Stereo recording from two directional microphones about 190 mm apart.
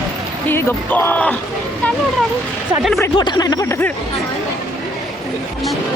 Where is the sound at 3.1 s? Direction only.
25° left (ahead or behind).